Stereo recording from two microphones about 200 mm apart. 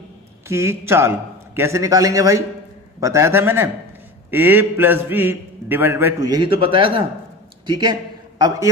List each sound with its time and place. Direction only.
0.5 s a man's voice: 15° right (ahead or behind)